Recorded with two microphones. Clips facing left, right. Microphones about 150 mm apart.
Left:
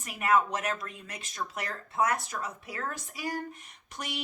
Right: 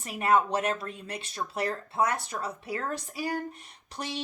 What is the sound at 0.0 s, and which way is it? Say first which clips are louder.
Speech: right 2 dB; 30° right (ahead or behind).